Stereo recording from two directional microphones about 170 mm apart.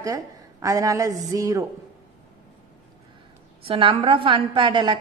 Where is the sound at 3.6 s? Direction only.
30° right (ahead or behind).